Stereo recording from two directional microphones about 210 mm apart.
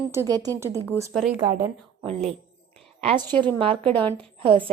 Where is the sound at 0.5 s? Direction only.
10° right (ahead or behind).